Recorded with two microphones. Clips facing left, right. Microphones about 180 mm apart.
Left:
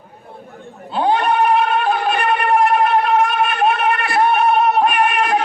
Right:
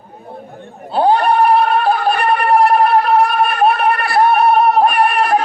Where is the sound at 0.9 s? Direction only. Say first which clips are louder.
Right 4 dB; 35° right (ahead or behind).